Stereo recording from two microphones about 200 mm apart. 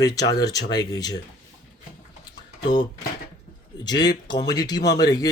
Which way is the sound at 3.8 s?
20° left (ahead or behind).